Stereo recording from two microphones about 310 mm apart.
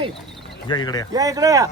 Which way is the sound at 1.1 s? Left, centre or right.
Centre.